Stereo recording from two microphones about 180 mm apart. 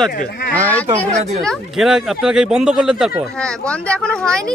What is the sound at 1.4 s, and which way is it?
Speech, centre (ahead or behind).